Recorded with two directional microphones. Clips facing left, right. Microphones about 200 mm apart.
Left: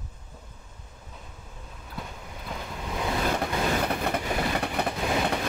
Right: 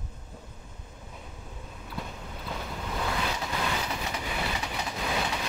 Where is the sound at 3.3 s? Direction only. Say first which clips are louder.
Left 5 dB; 55° left (ahead or behind).